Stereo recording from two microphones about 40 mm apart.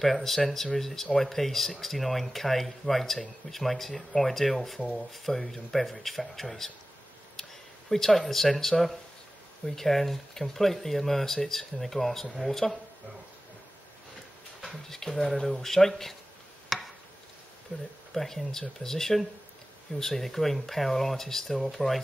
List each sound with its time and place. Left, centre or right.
0.0 s speech: centre
7.4 s a sound: centre
7.9 s speech: centre
14.6 s speech: centre
16.6 s a sound: centre
17.7 s speech: left
18.1 s speech: centre